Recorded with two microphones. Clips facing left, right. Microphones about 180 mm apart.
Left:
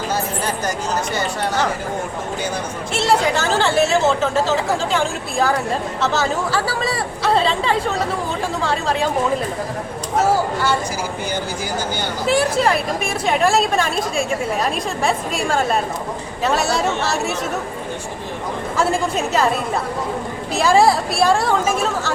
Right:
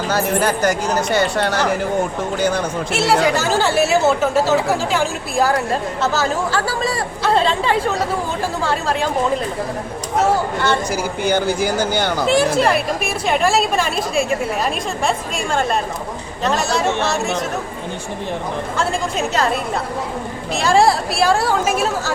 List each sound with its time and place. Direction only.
0.1 s speech: 75° right (ahead or behind)
2.9 s a woman's voice: 5° right (ahead or behind)
10.2 s speech: 10° left (ahead or behind)
11.3 s speech: 80° right
12.3 s a woman's voice: centre (ahead or behind)
18.8 s a woman's voice: 5° left (ahead or behind)
20.5 s a woman's voice: 5° left (ahead or behind)